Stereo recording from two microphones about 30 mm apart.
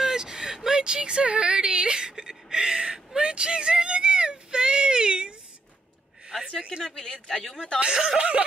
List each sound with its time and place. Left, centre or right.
0.1 s a sound: right
6.8 s speech: left
7.8 s speech: right
8.2 s snicker: right